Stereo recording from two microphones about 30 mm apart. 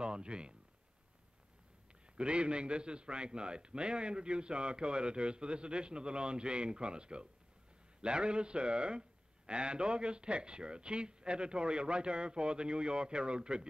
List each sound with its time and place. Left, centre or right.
0.0 s speech: right
2.1 s a man's voice: right